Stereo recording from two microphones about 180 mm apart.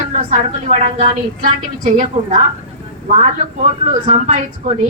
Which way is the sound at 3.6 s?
40° right (ahead or behind).